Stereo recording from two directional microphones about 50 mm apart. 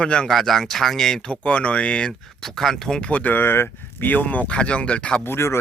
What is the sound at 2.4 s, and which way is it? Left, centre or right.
Speech, centre.